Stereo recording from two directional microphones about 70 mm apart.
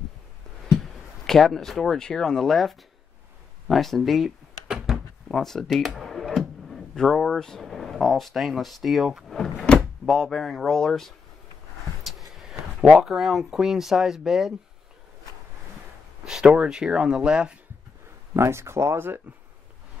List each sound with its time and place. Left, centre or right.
0.7 s speech: centre
9.3 s door: centre
12.0 s speech: centre
16.3 s speech: centre
18.3 s speech: right